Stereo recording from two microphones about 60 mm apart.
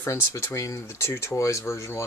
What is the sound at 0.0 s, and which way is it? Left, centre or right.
Speech, left.